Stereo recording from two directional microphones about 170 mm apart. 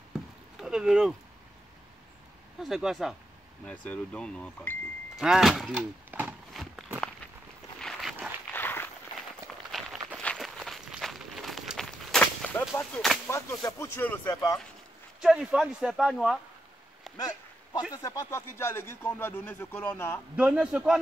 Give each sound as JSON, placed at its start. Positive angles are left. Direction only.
{"t": 0.6, "sound": "speech", "side_deg": -5}
{"t": 2.6, "sound": "speech", "side_deg": 0}
{"t": 6.1, "sound": "a sound", "side_deg": -10}
{"t": 6.5, "sound": "walk", "side_deg": 0}
{"t": 7.8, "sound": "a sound", "side_deg": 0}
{"t": 8.5, "sound": "a sound", "side_deg": 10}
{"t": 9.7, "sound": "walk", "side_deg": 0}
{"t": 13.3, "sound": "speech", "side_deg": 20}
{"t": 15.1, "sound": "speech", "side_deg": -5}
{"t": 18.0, "sound": "speech", "side_deg": 20}
{"t": 20.3, "sound": "a man's voice", "side_deg": -10}